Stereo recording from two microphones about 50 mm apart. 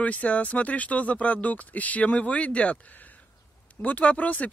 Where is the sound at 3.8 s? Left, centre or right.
Left.